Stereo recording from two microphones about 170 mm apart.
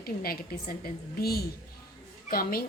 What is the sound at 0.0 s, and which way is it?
A woman's voice, 60° left (ahead or behind).